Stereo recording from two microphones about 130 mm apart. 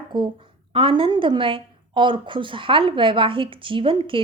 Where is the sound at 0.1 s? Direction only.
35° right (ahead or behind).